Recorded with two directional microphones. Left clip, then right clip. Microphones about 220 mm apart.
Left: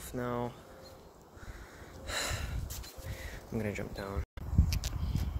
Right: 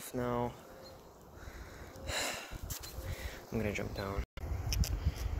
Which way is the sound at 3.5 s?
10° left (ahead or behind).